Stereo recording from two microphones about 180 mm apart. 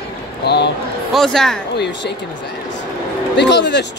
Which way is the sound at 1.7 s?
70° left (ahead or behind).